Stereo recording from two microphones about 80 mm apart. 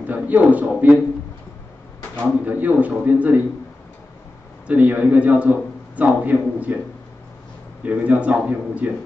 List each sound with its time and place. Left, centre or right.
0.0 s a man's voice: centre
2.4 s a man's voice: centre
4.6 s a man's voice: centre
7.8 s speech: centre